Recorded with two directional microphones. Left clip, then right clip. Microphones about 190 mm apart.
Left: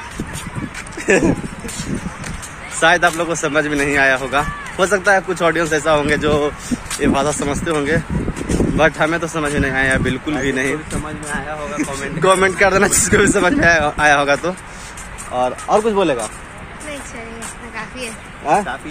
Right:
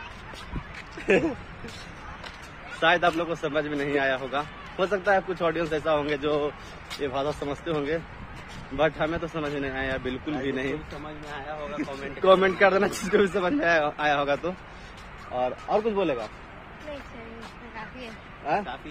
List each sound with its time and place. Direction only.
2.8 s speech: centre (ahead or behind)
18.5 s speech: 20° left (ahead or behind)